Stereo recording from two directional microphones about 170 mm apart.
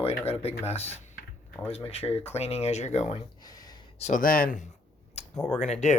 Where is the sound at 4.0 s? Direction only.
50° left (ahead or behind).